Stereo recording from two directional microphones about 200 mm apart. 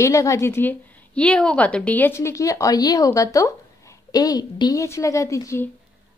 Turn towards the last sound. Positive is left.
turn(degrees=15)  # may be behind; listen again after turning